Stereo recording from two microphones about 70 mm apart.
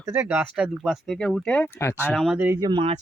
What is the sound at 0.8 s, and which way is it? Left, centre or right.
Speech, centre.